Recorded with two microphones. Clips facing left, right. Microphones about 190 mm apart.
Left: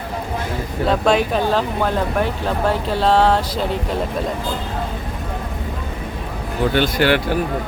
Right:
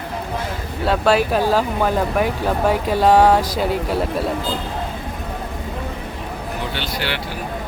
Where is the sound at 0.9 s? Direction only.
5° right (ahead or behind).